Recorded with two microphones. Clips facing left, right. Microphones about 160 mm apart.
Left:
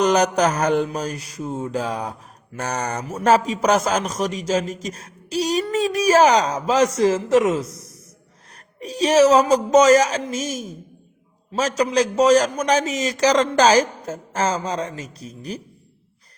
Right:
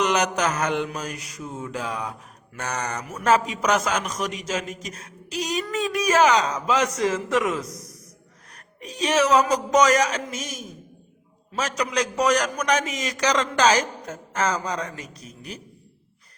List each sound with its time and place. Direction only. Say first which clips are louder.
0.0 s mantra: left 5 dB; 35° left (ahead or behind)
11.8 s mantra: left 6 dB; 30° left (ahead or behind)